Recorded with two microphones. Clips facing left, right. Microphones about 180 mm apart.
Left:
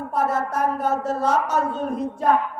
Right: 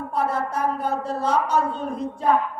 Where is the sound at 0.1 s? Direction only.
45° left (ahead or behind).